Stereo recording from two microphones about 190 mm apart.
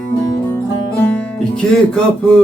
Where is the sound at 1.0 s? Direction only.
5° left (ahead or behind).